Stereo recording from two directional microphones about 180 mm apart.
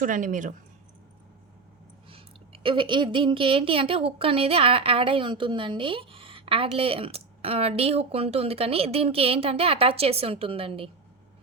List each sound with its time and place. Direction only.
0.0 s speech: 45° right (ahead or behind)
2.0 s a woman's voice: 30° right (ahead or behind)